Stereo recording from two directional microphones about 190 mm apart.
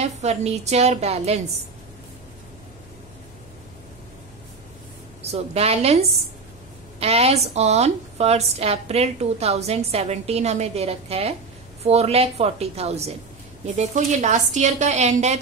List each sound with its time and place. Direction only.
0.0 s a woman's voice: 35° right (ahead or behind)
5.2 s a woman's voice: 35° right (ahead or behind)